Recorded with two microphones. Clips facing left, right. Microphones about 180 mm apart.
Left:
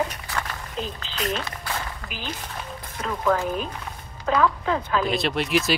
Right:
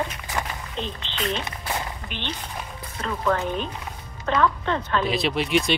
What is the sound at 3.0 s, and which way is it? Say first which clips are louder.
Speech: left 1 dB; 5° left (ahead or behind).